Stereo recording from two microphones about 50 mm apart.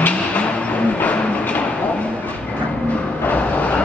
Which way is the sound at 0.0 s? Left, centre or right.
Left.